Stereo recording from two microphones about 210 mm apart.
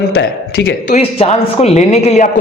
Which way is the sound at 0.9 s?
30° left (ahead or behind).